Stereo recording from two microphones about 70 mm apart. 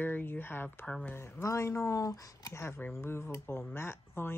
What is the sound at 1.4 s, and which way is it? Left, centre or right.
Speech, left.